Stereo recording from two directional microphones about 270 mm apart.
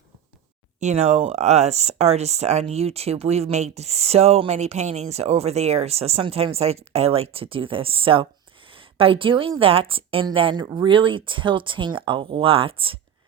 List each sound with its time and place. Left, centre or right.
0.8 s speech: right